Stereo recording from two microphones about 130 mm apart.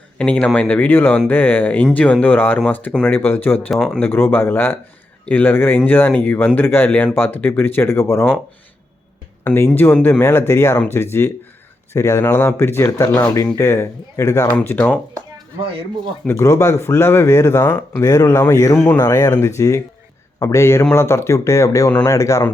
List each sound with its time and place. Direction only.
0.2 s speech: 10° left (ahead or behind)
3.7 s speech: 5° left (ahead or behind)
4.0 s speech: 15° left (ahead or behind)
9.4 s speech: 15° left (ahead or behind)
16.2 s speech: 20° left (ahead or behind)
18.9 s speech: 30° left (ahead or behind)